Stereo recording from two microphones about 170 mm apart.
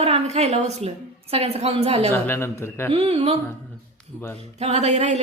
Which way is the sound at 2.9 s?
35° right (ahead or behind).